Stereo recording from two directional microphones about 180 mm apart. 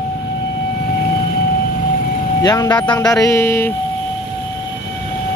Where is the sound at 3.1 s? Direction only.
15° left (ahead or behind).